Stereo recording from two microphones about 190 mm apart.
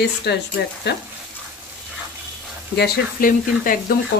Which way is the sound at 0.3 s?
60° left (ahead or behind).